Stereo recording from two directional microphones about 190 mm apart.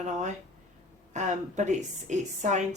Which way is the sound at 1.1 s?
40° right (ahead or behind).